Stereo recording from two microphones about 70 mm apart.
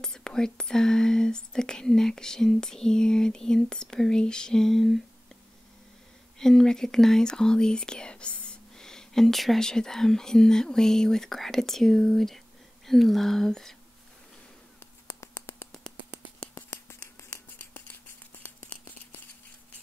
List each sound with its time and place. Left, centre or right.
0.0 s speech: centre
6.3 s speech: centre
14.8 s finger snapping: left
17.7 s a sound: left